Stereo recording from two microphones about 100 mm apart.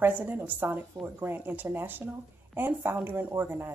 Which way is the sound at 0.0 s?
20° right (ahead or behind).